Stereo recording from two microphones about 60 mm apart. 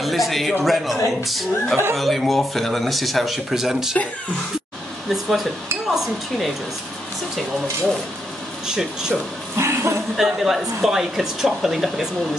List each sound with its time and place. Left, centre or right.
0.0 s speech: centre
5.1 s speech: centre
8.6 s speech: centre
9.6 s speech: right
10.1 s speech: centre